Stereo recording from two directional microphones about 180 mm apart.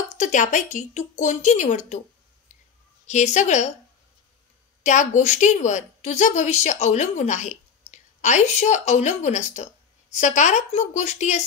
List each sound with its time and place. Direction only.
0.1 s a woman's voice: 45° left (ahead or behind)
3.1 s a woman's voice: 40° left (ahead or behind)
4.8 s a woman's voice: 45° left (ahead or behind)